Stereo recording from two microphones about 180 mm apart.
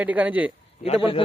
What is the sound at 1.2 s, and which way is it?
Speech, 30° left (ahead or behind).